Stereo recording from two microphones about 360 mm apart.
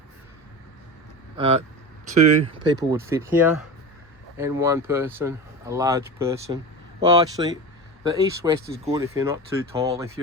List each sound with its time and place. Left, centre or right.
1.4 s speech: centre